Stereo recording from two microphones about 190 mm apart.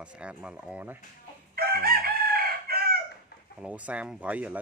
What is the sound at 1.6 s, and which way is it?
Chicken, 50° right (ahead or behind).